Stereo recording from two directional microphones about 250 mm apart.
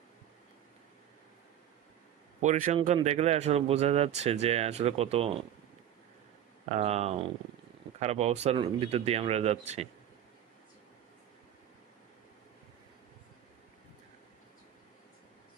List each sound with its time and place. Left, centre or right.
2.4 s speech: right
6.7 s speech: right